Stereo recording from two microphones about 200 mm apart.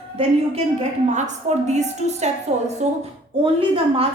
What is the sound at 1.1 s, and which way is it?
A woman's voice, 35° right (ahead or behind).